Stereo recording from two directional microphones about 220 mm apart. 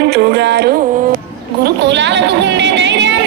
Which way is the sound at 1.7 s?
55° right (ahead or behind).